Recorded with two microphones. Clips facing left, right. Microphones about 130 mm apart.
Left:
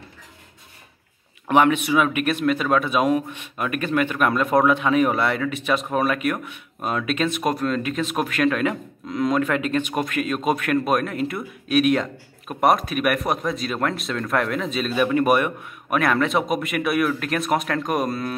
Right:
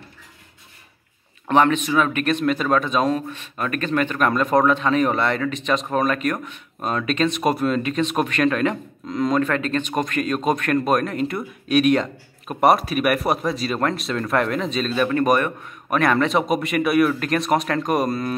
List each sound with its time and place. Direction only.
1.5 s a man's voice: 10° left (ahead or behind)